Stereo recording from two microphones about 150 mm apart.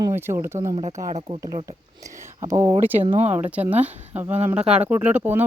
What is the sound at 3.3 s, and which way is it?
Speech, 10° right (ahead or behind).